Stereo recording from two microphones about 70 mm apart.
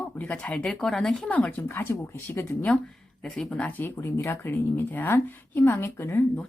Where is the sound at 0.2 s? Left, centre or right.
Centre.